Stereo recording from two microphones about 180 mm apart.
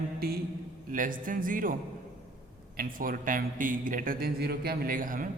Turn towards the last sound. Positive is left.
turn(degrees=-50)  # may be behind; listen again after turning